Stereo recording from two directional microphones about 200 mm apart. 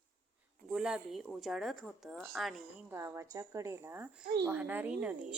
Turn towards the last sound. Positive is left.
turn(degrees=-5)  # may be behind; listen again after turning